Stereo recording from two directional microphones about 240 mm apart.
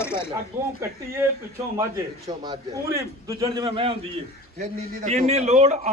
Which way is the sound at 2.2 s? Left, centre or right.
Centre.